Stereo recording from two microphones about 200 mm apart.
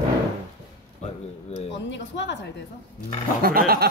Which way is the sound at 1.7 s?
60° left (ahead or behind).